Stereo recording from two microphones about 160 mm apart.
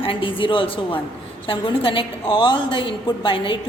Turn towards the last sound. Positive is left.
turn(degrees=30)  # may be behind; listen again after turning